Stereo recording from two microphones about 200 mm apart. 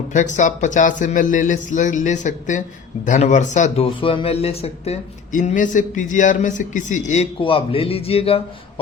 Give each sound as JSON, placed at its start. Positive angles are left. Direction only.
{"t": 0.1, "sound": "a man's voice", "side_deg": 40}